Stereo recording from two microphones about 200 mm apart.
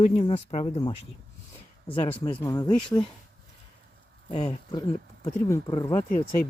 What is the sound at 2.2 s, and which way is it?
Speech, 15° left (ahead or behind).